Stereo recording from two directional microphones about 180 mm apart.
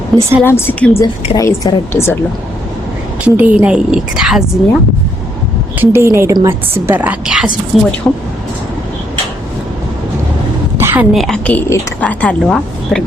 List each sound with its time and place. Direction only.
0.1 s speech: 5° left (ahead or behind)
3.2 s a woman's voice: 10° right (ahead or behind)
5.8 s a woman's voice: 15° right (ahead or behind)
10.8 s a sound: 15° right (ahead or behind)
11.1 s speech: centre (ahead or behind)